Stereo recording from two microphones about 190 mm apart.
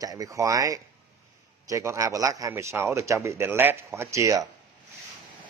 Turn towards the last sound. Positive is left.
turn(degrees=-15)  # may be behind; listen again after turning